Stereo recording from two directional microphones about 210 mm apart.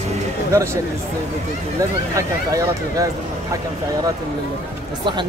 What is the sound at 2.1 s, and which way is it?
Speech, 15° right (ahead or behind).